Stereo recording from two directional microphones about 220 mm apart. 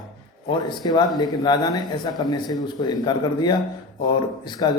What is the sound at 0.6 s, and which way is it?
Speech, 20° left (ahead or behind).